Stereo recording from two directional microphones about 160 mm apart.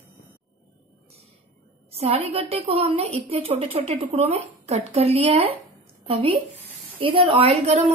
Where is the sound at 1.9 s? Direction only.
40° right (ahead or behind).